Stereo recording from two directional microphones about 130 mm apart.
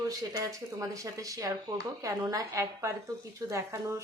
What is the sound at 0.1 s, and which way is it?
A woman's voice, 30° right (ahead or behind).